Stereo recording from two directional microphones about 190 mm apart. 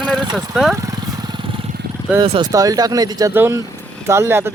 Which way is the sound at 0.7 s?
20° right (ahead or behind).